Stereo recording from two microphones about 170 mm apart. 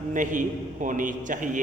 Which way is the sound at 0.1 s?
50° right (ahead or behind).